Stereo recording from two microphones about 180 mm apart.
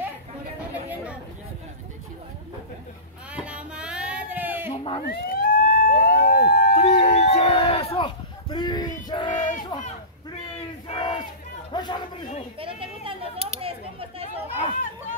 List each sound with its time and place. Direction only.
3.3 s a sound: 5° right (ahead or behind)
5.0 s emergency vehicle: 55° left (ahead or behind)
6.6 s a sound: 40° left (ahead or behind)
7.1 s livestock: 40° left (ahead or behind); by 8.9 s 25° left (ahead or behind)
9.3 s crowd: 45° left (ahead or behind)
10.9 s battle cry: 30° left (ahead or behind)
11.7 s chatter: 25° left (ahead or behind)
12.5 s chatter: 30° right (ahead or behind)
14.7 s a sound: 50° left (ahead or behind)